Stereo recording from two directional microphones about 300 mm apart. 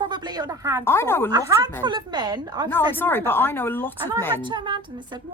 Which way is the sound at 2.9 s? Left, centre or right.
Centre.